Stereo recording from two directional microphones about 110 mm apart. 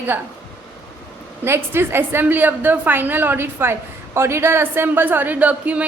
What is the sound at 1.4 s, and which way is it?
A woman's voice, 20° right (ahead or behind).